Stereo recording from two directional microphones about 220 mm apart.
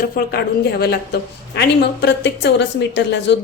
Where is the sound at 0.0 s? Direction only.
45° left (ahead or behind).